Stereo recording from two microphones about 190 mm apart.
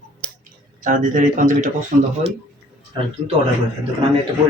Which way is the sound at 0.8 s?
45° right (ahead or behind).